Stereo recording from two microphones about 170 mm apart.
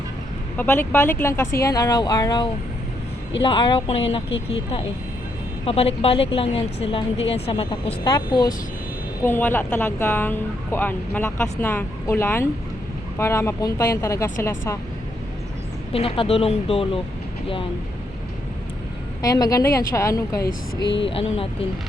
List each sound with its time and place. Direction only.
0.5 s a woman's voice: 10° left (ahead or behind); by 4.0 s 35° left (ahead or behind)
5.6 s a woman's voice: 35° left (ahead or behind)
9.2 s speech: 10° left (ahead or behind)
15.9 s a woman's voice: 35° left (ahead or behind)
19.2 s speech: 20° left (ahead or behind)
21.0 s a woman's voice: 35° left (ahead or behind)